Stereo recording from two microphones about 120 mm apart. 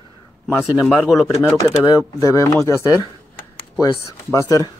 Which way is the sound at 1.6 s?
35° left (ahead or behind).